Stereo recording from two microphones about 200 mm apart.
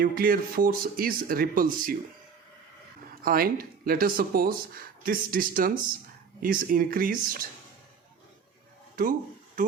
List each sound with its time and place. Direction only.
0.0 s speech: 45° right (ahead or behind)
3.2 s speech: 45° right (ahead or behind)
9.0 s speech: 45° right (ahead or behind)